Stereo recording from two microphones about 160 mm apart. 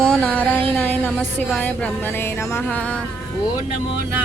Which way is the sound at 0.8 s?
10° left (ahead or behind).